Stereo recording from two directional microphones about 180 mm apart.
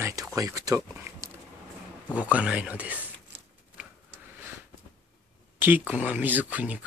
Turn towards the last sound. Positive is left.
turn(degrees=-10)  # may be behind; listen again after turning